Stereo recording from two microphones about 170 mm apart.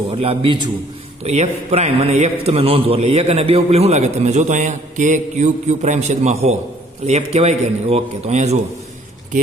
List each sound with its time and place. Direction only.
0.1 s a man's voice: 35° right (ahead or behind)